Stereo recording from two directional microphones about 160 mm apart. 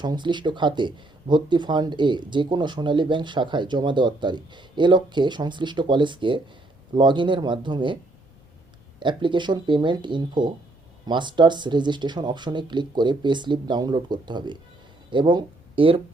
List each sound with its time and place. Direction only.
0.0 s speech: 30° right (ahead or behind)
9.0 s speech: 30° right (ahead or behind)